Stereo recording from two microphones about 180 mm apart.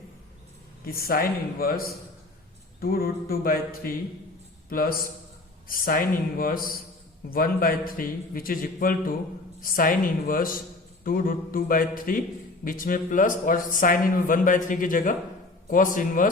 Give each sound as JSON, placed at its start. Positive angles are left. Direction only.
{"t": 0.9, "sound": "mantra", "side_deg": 55}
{"t": 4.7, "sound": "a man's voice", "side_deg": 55}